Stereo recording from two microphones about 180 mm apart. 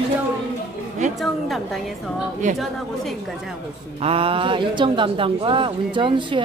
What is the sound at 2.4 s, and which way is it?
Speech, 45° right (ahead or behind).